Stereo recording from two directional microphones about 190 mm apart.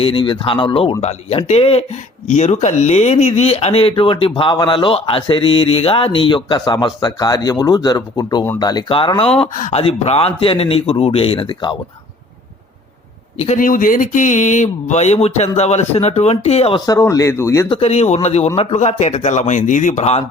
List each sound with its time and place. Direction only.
0.0 s speech: 25° left (ahead or behind)
13.4 s speech: 40° left (ahead or behind)
16.8 s speech: 20° left (ahead or behind)
17.7 s speech: 30° left (ahead or behind)